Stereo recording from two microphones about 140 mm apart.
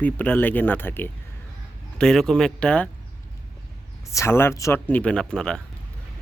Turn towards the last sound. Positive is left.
turn(degrees=5)  # may be behind; listen again after turning